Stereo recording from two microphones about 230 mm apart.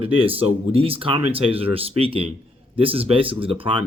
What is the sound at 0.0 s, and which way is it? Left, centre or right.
Speech, right.